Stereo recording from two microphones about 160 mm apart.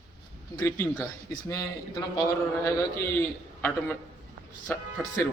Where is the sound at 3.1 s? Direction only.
10° left (ahead or behind).